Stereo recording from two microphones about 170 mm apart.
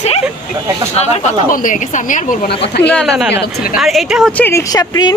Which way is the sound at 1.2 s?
50° left (ahead or behind).